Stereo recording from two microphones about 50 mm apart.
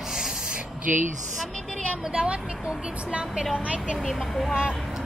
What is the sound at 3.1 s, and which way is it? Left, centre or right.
Speech, right.